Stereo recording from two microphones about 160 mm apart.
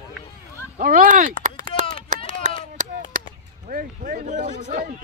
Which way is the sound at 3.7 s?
55° right (ahead or behind).